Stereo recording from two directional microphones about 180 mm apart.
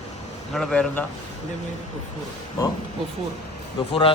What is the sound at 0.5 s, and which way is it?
Speech, 5° left (ahead or behind).